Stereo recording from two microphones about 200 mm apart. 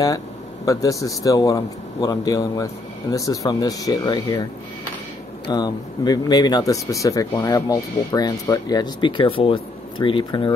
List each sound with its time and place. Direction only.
0.7 s speech: 15° left (ahead or behind)
5.5 s speech: 20° left (ahead or behind)